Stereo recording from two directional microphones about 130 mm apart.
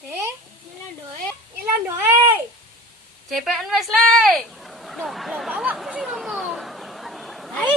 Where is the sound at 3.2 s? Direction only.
Centre (ahead or behind).